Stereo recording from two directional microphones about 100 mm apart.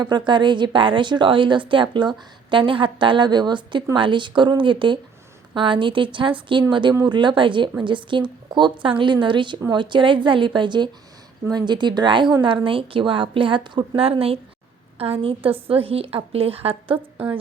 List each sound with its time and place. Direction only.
0.0 s a woman's voice: 50° right (ahead or behind)
14.0 s a woman's voice: 75° right (ahead or behind)